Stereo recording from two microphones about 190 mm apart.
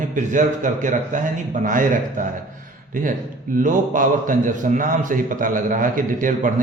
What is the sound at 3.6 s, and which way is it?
A man's voice, 45° right (ahead or behind).